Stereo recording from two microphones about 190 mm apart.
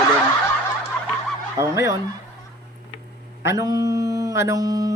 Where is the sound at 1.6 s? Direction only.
15° right (ahead or behind).